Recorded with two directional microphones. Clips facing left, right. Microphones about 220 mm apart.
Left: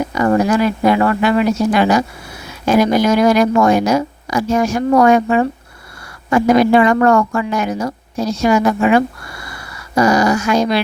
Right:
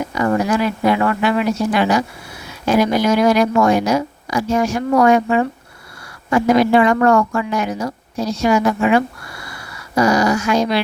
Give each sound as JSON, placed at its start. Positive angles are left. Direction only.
{"t": 0.1, "sound": "speech", "side_deg": 45}